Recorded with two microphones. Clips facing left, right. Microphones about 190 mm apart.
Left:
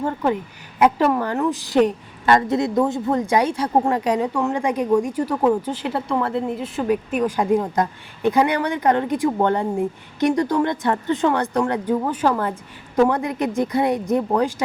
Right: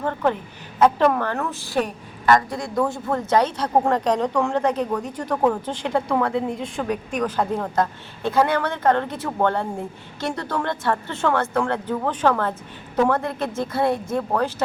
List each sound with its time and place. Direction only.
0.0 s a woman's voice: 10° left (ahead or behind)